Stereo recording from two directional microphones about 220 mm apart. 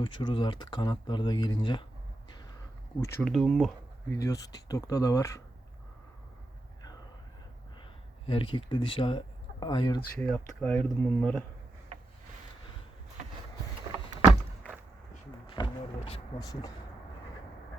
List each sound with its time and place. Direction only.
0.0 s speech: 20° left (ahead or behind)
3.0 s speech: 5° left (ahead or behind)
4.2 s speech: 15° left (ahead or behind)
8.3 s speech: 25° left (ahead or behind)
10.2 s speech: 5° left (ahead or behind)
15.4 s speech: 20° left (ahead or behind)